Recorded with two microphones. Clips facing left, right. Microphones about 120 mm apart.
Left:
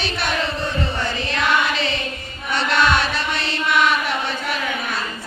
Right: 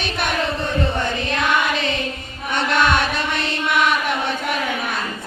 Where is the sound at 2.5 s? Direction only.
55° right (ahead or behind).